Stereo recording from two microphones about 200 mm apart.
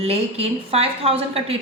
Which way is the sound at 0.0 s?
30° right (ahead or behind).